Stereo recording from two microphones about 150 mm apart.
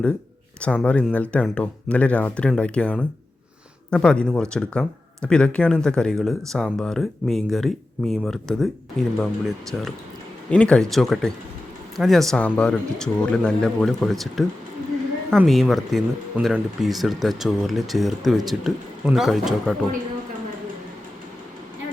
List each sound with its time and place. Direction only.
0.6 s speech: 10° left (ahead or behind)
15.4 s speech: centre (ahead or behind)